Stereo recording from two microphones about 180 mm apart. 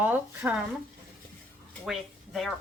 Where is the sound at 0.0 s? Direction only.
10° right (ahead or behind).